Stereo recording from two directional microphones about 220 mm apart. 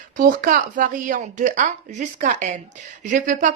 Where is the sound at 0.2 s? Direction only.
40° right (ahead or behind).